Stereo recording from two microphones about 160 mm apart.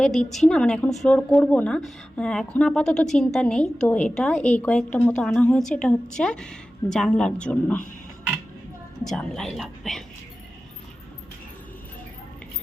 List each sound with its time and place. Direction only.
0.0 s a woman's voice: 5° left (ahead or behind)
9.0 s a woman's voice: 5° left (ahead or behind)